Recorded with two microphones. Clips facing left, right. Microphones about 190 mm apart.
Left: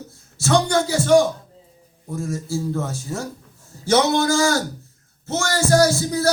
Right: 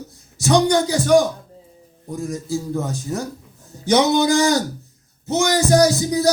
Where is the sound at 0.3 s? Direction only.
15° right (ahead or behind).